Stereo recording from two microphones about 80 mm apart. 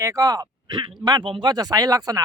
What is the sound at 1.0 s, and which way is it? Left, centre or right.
Speech, right.